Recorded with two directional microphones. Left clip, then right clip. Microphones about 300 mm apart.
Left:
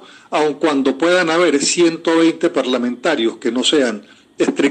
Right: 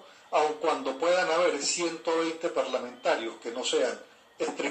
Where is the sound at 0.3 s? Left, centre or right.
Left.